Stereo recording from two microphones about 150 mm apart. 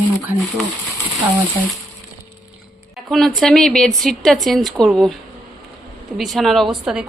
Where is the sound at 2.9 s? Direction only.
Centre (ahead or behind).